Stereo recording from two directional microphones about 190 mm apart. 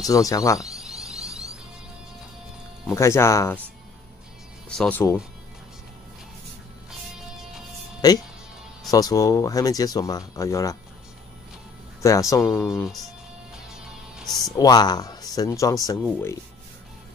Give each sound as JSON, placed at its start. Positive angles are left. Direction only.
{"t": 0.0, "sound": "speech", "side_deg": 15}
{"t": 0.6, "sound": "a sound", "side_deg": -5}
{"t": 2.9, "sound": "speech", "side_deg": 15}
{"t": 4.6, "sound": "speech", "side_deg": 5}
{"t": 8.0, "sound": "speech", "side_deg": 20}
{"t": 12.0, "sound": "speech", "side_deg": 15}
{"t": 13.7, "sound": "music", "side_deg": 0}
{"t": 14.6, "sound": "speech", "side_deg": 20}